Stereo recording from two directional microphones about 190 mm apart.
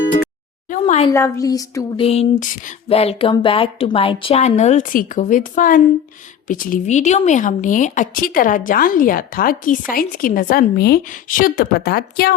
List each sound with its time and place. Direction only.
0.7 s a sound: 40° left (ahead or behind)
1.1 s speech: 15° left (ahead or behind)
2.0 s a woman's voice: 35° left (ahead or behind); by 12.3 s 55° left (ahead or behind)